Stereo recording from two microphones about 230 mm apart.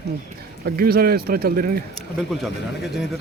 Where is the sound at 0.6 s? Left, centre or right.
Right.